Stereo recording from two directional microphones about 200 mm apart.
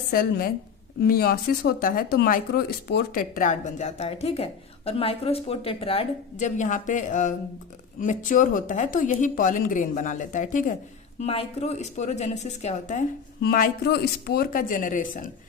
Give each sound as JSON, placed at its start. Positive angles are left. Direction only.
{"t": 0.1, "sound": "speech", "side_deg": 45}